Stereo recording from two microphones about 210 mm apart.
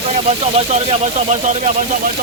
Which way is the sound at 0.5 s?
30° right (ahead or behind).